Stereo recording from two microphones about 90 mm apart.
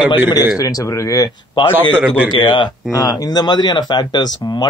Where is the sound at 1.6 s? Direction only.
60° left (ahead or behind).